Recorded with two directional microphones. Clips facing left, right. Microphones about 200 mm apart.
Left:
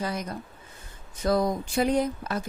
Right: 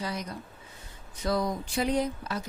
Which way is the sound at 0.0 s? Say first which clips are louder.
Left 3 dB; 50° left (ahead or behind).